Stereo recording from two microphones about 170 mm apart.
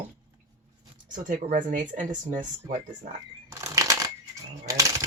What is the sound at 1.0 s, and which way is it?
Speech, 50° right (ahead or behind).